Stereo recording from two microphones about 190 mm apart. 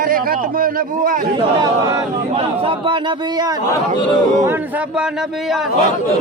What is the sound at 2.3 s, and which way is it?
A man's voice, 30° right (ahead or behind).